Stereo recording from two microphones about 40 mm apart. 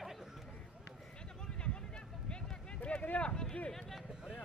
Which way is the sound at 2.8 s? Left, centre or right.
Left.